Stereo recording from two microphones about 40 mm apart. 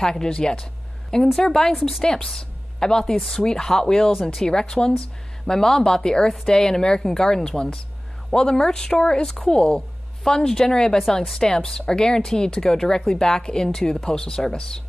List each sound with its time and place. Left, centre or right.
0.0 s speech: centre
1.8 s a woman's voice: centre
2.0 s a woman's voice: centre